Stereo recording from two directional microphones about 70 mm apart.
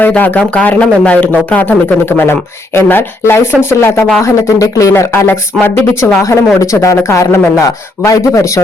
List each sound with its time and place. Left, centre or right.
0.3 s speech: centre; by 4.0 s left
4.2 s speech: left
5.3 s speech: left
6.2 s speech: left